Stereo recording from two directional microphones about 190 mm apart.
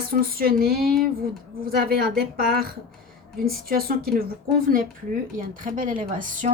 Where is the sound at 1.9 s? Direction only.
50° right (ahead or behind).